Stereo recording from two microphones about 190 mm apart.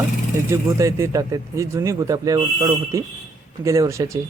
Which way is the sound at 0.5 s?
15° right (ahead or behind).